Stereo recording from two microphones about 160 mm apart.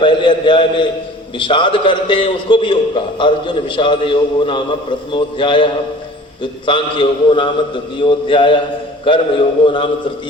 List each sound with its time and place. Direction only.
0.0 s a man's voice: 30° left (ahead or behind)